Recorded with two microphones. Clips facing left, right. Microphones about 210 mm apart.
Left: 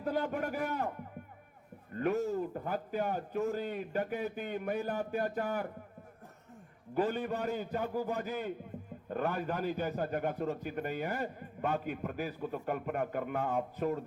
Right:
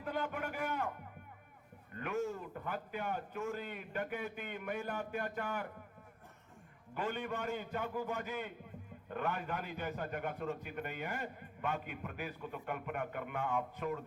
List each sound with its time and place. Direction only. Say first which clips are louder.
0.0 s a man's voice: left 6 dB; 35° left (ahead or behind)
2.0 s a man's voice: left 7 dB; 35° left (ahead or behind)
6.9 s a man's voice: left 7 dB; 35° left (ahead or behind)